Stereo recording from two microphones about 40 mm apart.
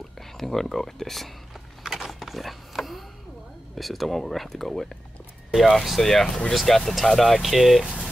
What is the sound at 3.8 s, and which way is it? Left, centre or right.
Speech, centre.